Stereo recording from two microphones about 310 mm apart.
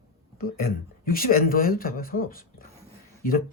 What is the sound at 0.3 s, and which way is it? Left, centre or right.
Speech, left.